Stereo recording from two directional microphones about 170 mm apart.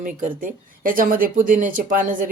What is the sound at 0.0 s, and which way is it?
A woman's voice, 55° right (ahead or behind).